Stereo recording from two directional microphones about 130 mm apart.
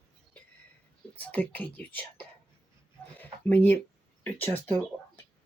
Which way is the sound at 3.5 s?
10° left (ahead or behind).